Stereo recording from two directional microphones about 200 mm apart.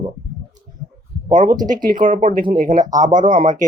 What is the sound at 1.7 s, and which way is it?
Speech, 45° right (ahead or behind).